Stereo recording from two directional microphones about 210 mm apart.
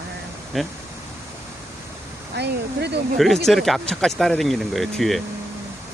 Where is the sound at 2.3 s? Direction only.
55° right (ahead or behind).